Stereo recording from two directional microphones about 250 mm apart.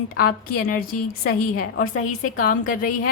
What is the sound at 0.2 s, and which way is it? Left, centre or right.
A woman's voice, left.